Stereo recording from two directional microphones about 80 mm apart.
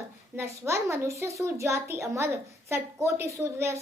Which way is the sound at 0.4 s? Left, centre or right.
Right.